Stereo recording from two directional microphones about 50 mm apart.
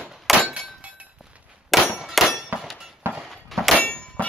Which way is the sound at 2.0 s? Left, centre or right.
Centre.